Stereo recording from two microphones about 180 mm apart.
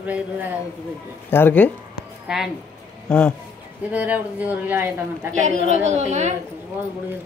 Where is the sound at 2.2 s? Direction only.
Centre (ahead or behind).